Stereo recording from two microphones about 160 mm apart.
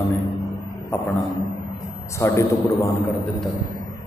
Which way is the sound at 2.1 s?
15° left (ahead or behind).